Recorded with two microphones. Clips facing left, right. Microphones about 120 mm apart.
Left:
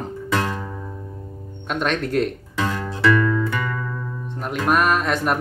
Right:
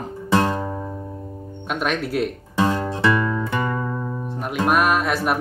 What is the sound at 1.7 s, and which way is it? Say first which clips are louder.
Music: left 1 dB; 5° right (ahead or behind).